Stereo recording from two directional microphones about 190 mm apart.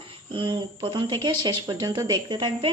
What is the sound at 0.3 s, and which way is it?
Speech, 25° right (ahead or behind).